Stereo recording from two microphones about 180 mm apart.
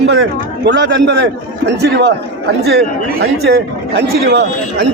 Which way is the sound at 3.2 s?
65° right (ahead or behind).